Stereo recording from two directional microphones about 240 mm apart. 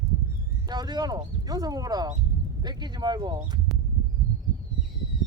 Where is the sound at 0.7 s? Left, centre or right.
Centre.